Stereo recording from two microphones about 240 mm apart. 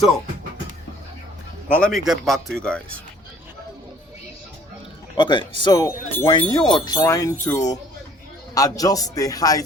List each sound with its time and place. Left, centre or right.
1.7 s speech: centre
5.1 s speech: centre